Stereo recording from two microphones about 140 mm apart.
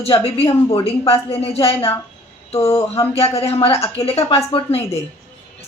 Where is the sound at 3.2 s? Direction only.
45° left (ahead or behind).